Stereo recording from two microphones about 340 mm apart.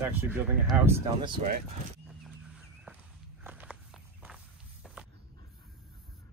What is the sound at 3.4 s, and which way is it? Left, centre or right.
Walk, centre.